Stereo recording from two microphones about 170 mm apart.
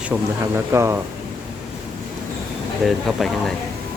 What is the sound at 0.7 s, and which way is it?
Speech, 15° right (ahead or behind).